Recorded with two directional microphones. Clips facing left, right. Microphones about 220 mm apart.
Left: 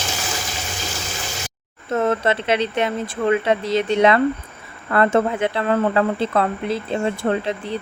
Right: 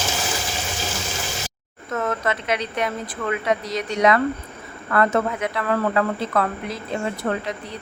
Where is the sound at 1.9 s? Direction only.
30° left (ahead or behind).